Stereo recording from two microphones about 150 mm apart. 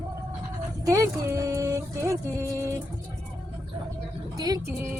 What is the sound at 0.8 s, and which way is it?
Speech, 20° right (ahead or behind).